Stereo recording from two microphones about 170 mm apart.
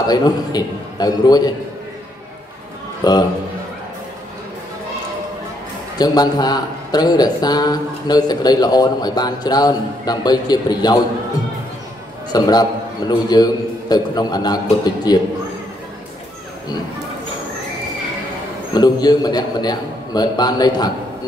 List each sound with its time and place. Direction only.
0.0 s a man's voice: 25° left (ahead or behind)
3.0 s a man's voice: 25° left (ahead or behind)
5.9 s a man's voice: 25° left (ahead or behind)
12.3 s a man's voice: 25° left (ahead or behind)
18.7 s a man's voice: 25° left (ahead or behind)